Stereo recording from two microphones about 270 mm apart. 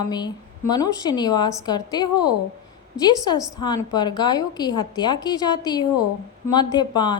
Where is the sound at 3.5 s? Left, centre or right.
Centre.